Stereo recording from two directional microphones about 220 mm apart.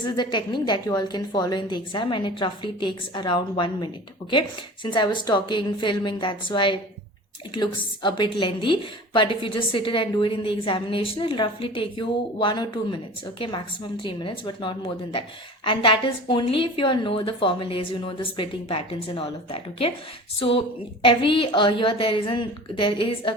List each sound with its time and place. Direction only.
0.0 s a woman's voice: 20° left (ahead or behind)